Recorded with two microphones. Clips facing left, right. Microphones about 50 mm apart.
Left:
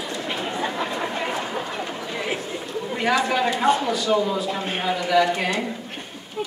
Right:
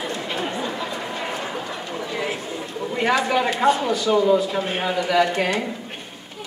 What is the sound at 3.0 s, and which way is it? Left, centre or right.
A man's voice, centre.